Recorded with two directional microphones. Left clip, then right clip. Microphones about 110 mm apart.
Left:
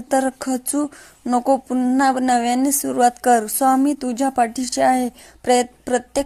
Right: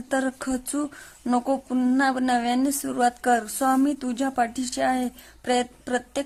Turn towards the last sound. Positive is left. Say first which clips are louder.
# left 6 dB
turn(degrees=30)  # may be behind; listen again after turning